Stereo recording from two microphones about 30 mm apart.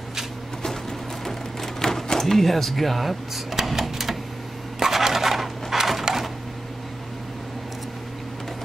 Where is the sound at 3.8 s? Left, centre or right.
Centre.